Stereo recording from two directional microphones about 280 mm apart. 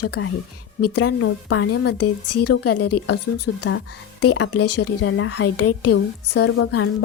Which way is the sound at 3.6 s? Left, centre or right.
Left.